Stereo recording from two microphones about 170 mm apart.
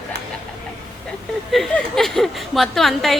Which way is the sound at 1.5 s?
Centre (ahead or behind).